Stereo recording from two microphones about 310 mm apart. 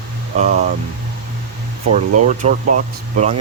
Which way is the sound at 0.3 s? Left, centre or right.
Right.